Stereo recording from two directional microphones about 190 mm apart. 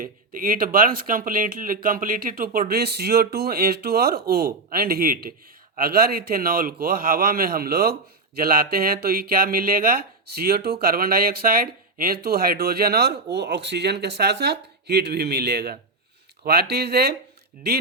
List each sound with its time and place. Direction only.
0.0 s speech: 50° right (ahead or behind)